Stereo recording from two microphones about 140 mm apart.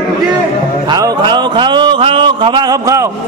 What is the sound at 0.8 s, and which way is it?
Speech, 30° right (ahead or behind).